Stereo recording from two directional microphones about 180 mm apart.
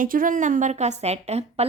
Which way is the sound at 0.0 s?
50° right (ahead or behind).